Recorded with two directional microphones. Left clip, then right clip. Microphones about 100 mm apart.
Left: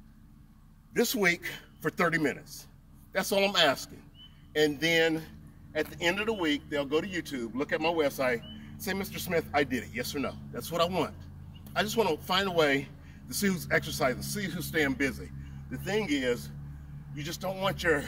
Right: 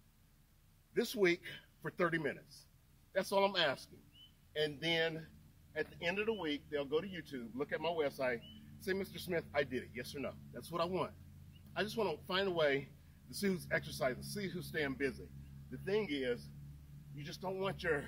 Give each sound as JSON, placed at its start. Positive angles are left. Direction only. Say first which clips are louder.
{"t": 0.9, "sound": "speech", "louder": "left 7 dB", "side_deg": -25}